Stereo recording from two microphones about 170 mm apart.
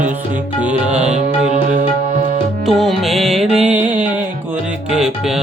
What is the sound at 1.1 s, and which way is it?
Music, 45° right (ahead or behind).